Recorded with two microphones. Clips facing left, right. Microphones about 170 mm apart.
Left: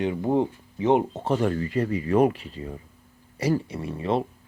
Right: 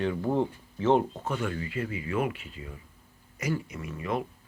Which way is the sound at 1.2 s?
35° left (ahead or behind).